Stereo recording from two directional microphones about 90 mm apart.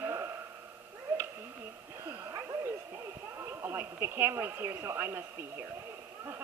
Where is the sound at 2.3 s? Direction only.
45° right (ahead or behind); by 6.4 s 30° right (ahead or behind).